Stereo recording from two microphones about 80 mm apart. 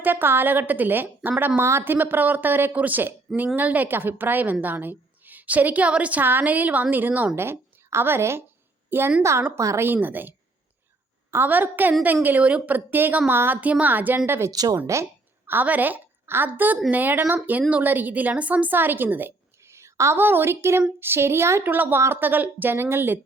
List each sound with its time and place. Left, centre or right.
0.0 s a woman's voice: right
9.6 s speech: right
9.8 s a woman's voice: right
14.5 s speech: right
15.4 s a woman's voice: right
19.6 s a woman's voice: right